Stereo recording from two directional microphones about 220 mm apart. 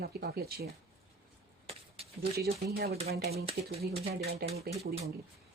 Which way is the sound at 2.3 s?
45° right (ahead or behind).